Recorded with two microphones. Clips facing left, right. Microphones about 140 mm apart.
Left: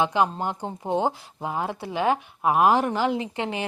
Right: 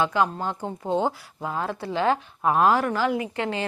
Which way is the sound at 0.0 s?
20° left (ahead or behind).